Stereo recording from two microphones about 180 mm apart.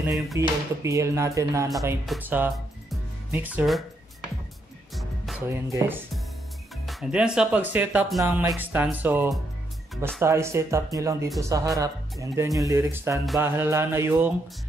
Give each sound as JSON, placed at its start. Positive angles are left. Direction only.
{"t": 0.3, "sound": "speech", "side_deg": -15}
{"t": 2.5, "sound": "music", "side_deg": 0}
{"t": 3.3, "sound": "speech", "side_deg": -10}
{"t": 4.9, "sound": "music", "side_deg": 0}
{"t": 5.5, "sound": "speech", "side_deg": -15}
{"t": 6.9, "sound": "speech", "side_deg": -5}